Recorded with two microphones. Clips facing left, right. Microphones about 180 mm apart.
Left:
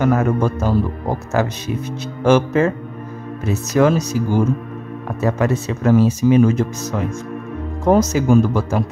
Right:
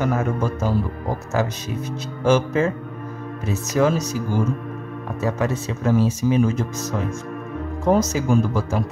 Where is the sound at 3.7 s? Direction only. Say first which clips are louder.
Left 4 dB; 65° left (ahead or behind).